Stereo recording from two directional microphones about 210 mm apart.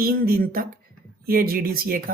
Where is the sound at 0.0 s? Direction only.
45° right (ahead or behind).